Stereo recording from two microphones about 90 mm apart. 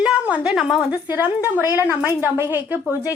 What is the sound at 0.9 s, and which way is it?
A woman's voice, 15° right (ahead or behind).